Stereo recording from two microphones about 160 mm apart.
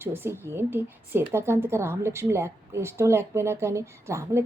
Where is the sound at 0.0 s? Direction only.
15° right (ahead or behind).